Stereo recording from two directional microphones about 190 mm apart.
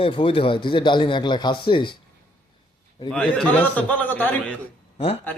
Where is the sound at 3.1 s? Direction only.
5° left (ahead or behind).